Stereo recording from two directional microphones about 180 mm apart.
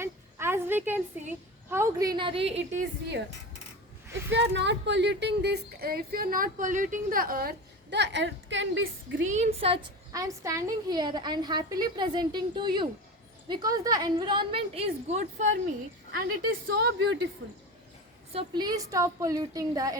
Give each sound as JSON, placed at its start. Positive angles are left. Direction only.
{"t": 0.0, "sound": "a sound", "side_deg": -15}
{"t": 1.7, "sound": "a woman's voice", "side_deg": -15}
{"t": 4.3, "sound": "speech", "side_deg": -80}
{"t": 9.2, "sound": "a woman's voice", "side_deg": -40}
{"t": 10.1, "sound": "a woman's voice", "side_deg": -20}
{"t": 16.1, "sound": "a woman's voice", "side_deg": -60}
{"t": 18.3, "sound": "a woman's voice", "side_deg": -25}